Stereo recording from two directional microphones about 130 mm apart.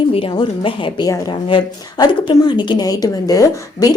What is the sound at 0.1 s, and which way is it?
A woman's voice, 45° left (ahead or behind).